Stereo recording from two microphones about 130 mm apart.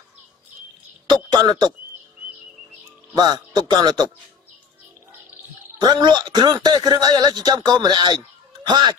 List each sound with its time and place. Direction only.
1.0 s speech: 35° right (ahead or behind)
3.2 s speech: 35° right (ahead or behind)
5.8 s speech: 35° right (ahead or behind)